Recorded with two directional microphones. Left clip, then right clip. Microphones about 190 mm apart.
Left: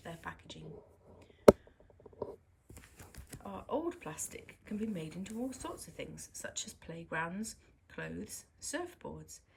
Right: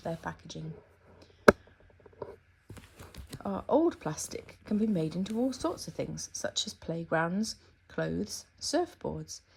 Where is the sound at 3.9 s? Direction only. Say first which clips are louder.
Right 7 dB; 20° right (ahead or behind).